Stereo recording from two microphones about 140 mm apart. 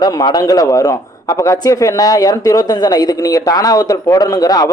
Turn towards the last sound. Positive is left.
turn(degrees=25)  # may be behind; listen again after turning